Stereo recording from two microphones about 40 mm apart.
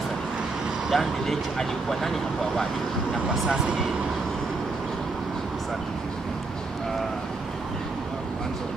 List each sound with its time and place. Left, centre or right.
0.9 s speech: centre
3.4 s speech: right